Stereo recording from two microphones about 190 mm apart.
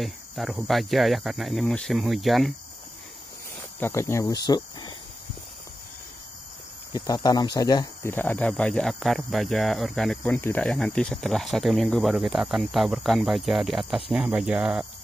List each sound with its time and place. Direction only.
0.0 s speech: centre (ahead or behind)
3.8 s speech: 15° left (ahead or behind)
6.9 s speech: 20° left (ahead or behind)
8.1 s speech: 10° left (ahead or behind)